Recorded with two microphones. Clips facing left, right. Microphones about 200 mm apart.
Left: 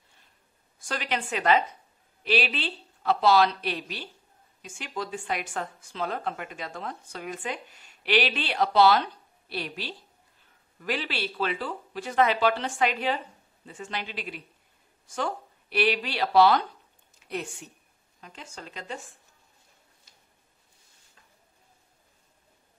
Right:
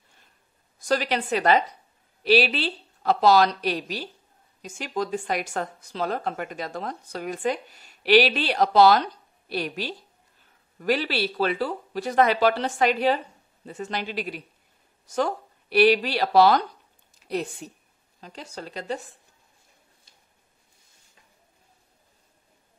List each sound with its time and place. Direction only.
0.7 s speech: 40° right (ahead or behind)